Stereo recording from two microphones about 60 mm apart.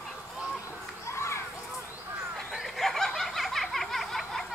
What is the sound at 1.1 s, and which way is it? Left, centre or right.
Children playing, left.